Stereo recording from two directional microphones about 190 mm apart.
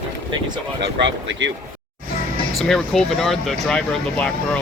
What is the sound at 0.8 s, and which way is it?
Speech, 70° right (ahead or behind).